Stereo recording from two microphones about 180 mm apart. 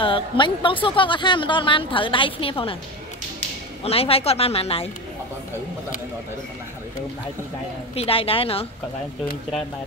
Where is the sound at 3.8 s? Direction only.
35° left (ahead or behind).